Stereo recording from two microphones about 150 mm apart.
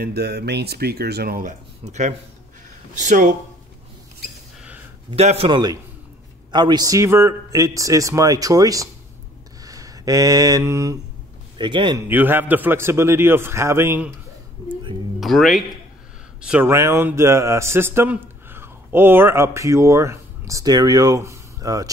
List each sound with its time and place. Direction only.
0.0 s speech: 90° right
1.9 s a man's voice: 50° right (ahead or behind)
5.1 s a man's voice: 45° right (ahead or behind)
5.5 s a man's voice: 25° right (ahead or behind)
11.5 s a man's voice: 30° right (ahead or behind)
12.1 s a man's voice: 10° right (ahead or behind)
15.1 s speech: centre (ahead or behind); by 21.9 s 25° right (ahead or behind)